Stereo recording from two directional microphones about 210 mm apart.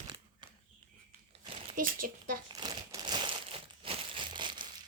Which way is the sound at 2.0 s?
40° right (ahead or behind).